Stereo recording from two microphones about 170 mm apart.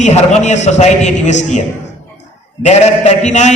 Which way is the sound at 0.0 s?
40° left (ahead or behind).